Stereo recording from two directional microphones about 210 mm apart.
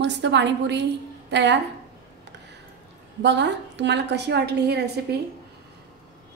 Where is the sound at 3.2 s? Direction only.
55° right (ahead or behind).